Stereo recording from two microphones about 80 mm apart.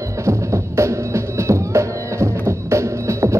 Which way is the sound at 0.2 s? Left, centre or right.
Right.